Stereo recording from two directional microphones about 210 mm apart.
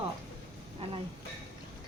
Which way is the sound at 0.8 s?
30° right (ahead or behind).